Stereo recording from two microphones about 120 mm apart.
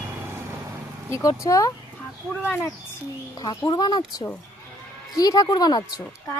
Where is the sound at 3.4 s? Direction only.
35° left (ahead or behind).